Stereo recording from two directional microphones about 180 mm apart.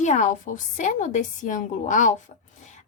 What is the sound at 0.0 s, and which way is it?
A woman's voice, 45° left (ahead or behind).